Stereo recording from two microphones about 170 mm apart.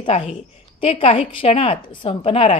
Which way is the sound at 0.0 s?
30° left (ahead or behind).